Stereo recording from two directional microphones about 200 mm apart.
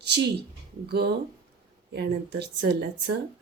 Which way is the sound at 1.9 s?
55° right (ahead or behind).